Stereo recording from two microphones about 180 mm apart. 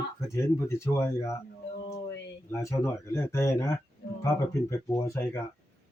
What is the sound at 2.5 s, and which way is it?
Speech, 15° left (ahead or behind).